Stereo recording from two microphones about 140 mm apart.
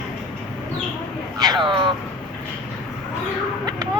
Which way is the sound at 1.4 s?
30° right (ahead or behind).